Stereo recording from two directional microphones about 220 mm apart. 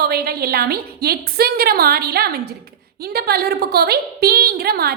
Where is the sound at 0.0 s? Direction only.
45° right (ahead or behind).